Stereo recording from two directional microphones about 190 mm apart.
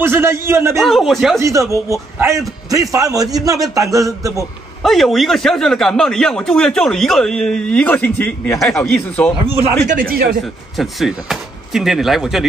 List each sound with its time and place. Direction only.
0.0 s a man's voice: 10° right (ahead or behind)
0.7 s speech: centre (ahead or behind)
1.4 s a man's voice: 15° right (ahead or behind)
4.8 s speech: centre (ahead or behind)
9.8 s speech: 50° right (ahead or behind)
10.4 s speech: centre (ahead or behind)